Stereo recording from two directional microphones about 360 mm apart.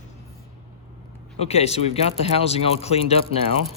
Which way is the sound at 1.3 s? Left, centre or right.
Centre.